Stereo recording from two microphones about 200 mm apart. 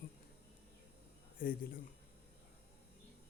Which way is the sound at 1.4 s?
45° left (ahead or behind).